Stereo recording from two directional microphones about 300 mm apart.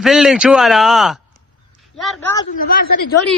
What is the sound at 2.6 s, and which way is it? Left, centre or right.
Speech, left.